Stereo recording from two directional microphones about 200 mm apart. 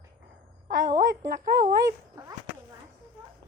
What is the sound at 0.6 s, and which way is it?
A woman's voice, 40° right (ahead or behind).